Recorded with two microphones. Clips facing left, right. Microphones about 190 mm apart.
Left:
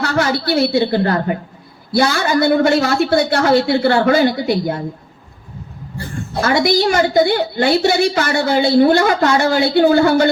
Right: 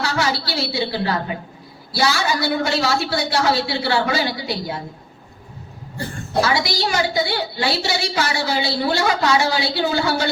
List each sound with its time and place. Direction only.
0.0 s a woman's voice: 55° left (ahead or behind)
6.4 s a woman's voice: 50° left (ahead or behind)